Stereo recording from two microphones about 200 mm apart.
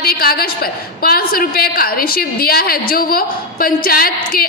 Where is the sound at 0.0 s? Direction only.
50° left (ahead or behind).